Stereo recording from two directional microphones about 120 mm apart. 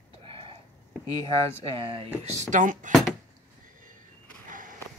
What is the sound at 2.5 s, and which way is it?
Speech, 90° right.